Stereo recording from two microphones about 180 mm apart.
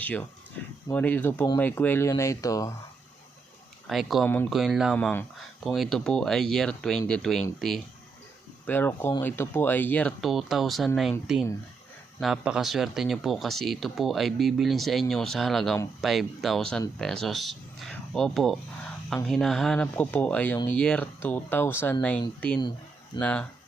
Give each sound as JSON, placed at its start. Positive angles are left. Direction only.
{"t": 0.0, "sound": "speech", "side_deg": 10}
{"t": 3.8, "sound": "speech", "side_deg": 0}
{"t": 8.6, "sound": "speech", "side_deg": 10}
{"t": 12.2, "sound": "speech", "side_deg": -5}